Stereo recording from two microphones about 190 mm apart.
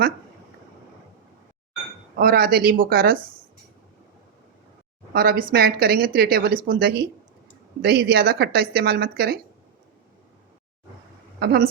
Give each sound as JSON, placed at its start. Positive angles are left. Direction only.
{"t": 2.1, "sound": "speech", "side_deg": -50}
{"t": 5.1, "sound": "a woman's voice", "side_deg": -50}
{"t": 11.3, "sound": "speech", "side_deg": -55}